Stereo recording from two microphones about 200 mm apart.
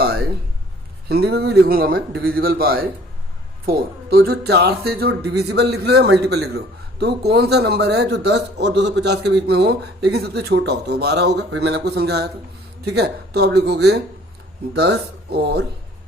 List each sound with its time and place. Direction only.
1.0 s a man's voice: 55° right (ahead or behind)